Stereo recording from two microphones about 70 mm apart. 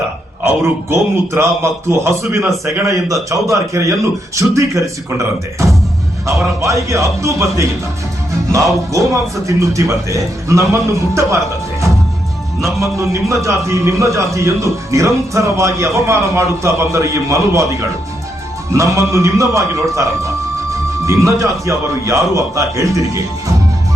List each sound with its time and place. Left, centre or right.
0.4 s a man's voice: right
2.8 s speech: right
13.0 s speech: right